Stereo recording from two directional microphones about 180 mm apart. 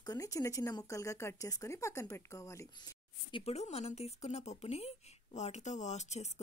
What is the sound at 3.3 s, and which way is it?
Speech, 35° left (ahead or behind).